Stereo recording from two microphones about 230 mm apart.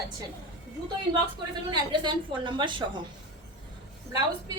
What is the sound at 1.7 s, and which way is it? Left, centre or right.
A woman's voice, centre.